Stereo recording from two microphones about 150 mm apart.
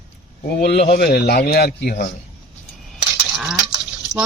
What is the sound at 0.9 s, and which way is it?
Speech, 90° left.